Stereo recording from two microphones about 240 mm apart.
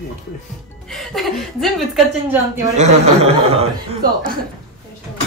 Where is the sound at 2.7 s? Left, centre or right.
Right.